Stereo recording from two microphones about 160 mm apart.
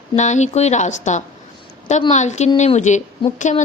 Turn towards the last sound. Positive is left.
turn(degrees=50)  # may be behind; listen again after turning